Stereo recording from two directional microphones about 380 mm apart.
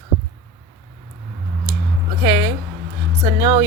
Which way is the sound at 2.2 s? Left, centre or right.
Centre.